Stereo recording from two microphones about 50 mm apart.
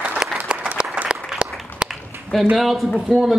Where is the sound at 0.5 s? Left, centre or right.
Right.